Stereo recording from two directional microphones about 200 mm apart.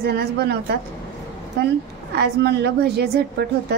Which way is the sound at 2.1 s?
55° right (ahead or behind).